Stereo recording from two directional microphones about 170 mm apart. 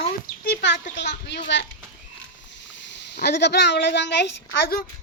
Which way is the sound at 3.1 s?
80° left.